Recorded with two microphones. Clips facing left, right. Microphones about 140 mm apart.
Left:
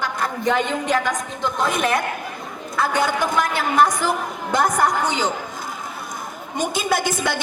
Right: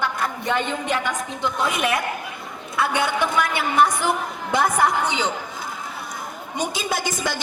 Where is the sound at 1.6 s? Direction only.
10° right (ahead or behind).